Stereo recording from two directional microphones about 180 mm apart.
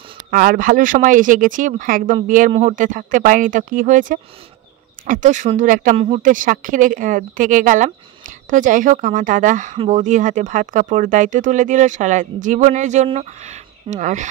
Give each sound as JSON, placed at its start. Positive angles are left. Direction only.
{"t": 0.3, "sound": "speech", "side_deg": -50}